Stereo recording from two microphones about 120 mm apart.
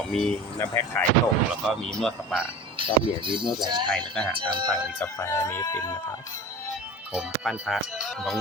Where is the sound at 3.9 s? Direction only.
5° left (ahead or behind).